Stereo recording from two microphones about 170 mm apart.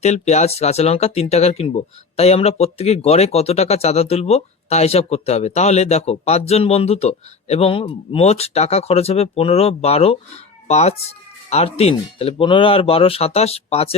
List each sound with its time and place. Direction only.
0.0 s speech: 40° left (ahead or behind)